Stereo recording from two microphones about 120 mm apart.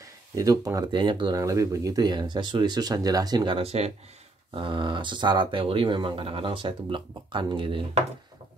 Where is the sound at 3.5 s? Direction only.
55° right (ahead or behind).